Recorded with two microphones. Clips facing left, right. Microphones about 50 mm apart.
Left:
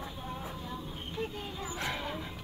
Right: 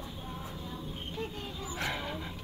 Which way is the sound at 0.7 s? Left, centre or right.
Centre.